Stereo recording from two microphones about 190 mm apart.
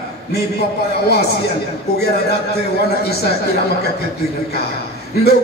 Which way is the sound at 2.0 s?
60° left (ahead or behind).